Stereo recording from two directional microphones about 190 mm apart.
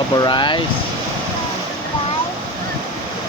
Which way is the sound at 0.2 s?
25° left (ahead or behind).